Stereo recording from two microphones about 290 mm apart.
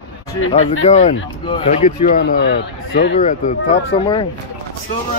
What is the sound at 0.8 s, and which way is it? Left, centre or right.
Speech, left.